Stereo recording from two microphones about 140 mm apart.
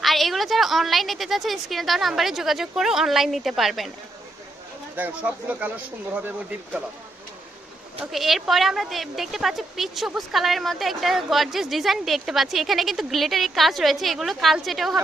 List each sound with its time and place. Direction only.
0.0 s a woman's voice: centre (ahead or behind)
4.9 s speech: 10° right (ahead or behind)
8.1 s a woman's voice: centre (ahead or behind)